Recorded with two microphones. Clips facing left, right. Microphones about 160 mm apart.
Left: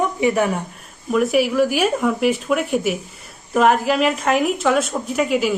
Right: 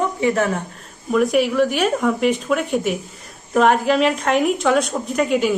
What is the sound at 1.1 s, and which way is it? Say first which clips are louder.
Speech: even; 5° left (ahead or behind).